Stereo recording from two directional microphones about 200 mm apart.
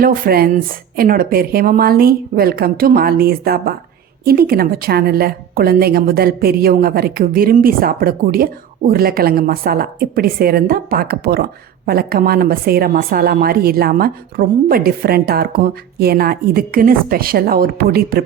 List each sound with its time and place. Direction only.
0.0 s a woman's voice: 50° right (ahead or behind)